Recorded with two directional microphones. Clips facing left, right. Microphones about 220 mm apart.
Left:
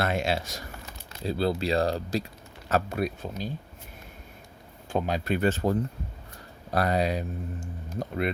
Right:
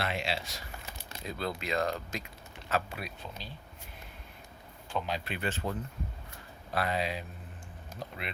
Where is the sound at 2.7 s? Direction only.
45° left (ahead or behind).